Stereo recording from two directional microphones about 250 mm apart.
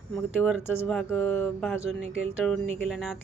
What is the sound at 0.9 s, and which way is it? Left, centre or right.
A woman's voice, centre.